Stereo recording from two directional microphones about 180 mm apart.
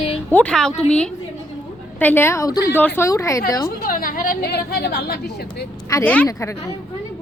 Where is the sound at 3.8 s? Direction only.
50° left (ahead or behind).